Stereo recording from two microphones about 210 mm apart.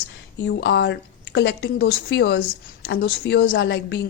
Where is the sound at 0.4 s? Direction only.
55° left (ahead or behind).